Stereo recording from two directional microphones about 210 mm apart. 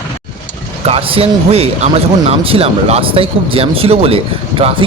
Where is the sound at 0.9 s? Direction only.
25° right (ahead or behind).